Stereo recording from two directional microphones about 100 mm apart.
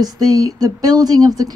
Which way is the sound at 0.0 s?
40° right (ahead or behind).